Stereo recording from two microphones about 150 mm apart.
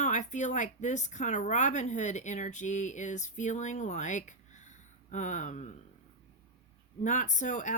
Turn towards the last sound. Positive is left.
turn(degrees=55)  # may be behind; listen again after turning